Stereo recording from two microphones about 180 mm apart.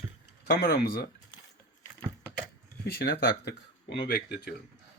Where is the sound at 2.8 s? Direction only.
60° left (ahead or behind).